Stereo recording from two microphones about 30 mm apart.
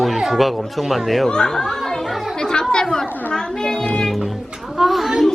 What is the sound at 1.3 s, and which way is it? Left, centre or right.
Speech, left.